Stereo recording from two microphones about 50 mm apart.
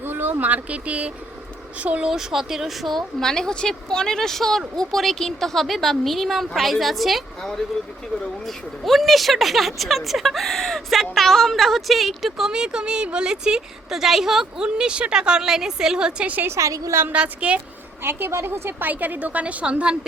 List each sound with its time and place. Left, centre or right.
0.0 s a woman's voice: right
2.0 s speech: centre
12.5 s a woman's voice: centre
14.6 s a woman's voice: centre
16.2 s a woman's voice: right
16.5 s a woman's voice: right
17.1 s a woman's voice: right
18.0 s a woman's voice: right
18.9 s a woman's voice: right